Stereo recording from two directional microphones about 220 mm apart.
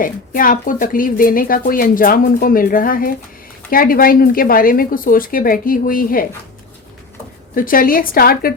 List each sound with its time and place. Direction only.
0.0 s speech: 40° left (ahead or behind)
7.5 s speech: 40° left (ahead or behind)